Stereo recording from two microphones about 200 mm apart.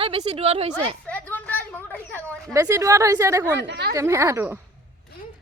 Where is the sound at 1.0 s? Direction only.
10° left (ahead or behind).